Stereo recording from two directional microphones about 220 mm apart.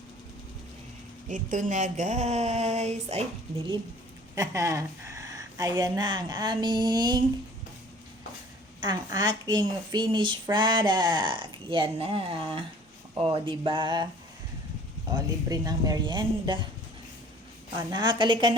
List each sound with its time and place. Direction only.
1.3 s speech: 35° right (ahead or behind)
4.4 s speech: 15° right (ahead or behind)
8.8 s a woman's voice: 20° right (ahead or behind)
15.1 s a woman's voice: 15° right (ahead or behind)
17.7 s a woman's voice: 20° right (ahead or behind)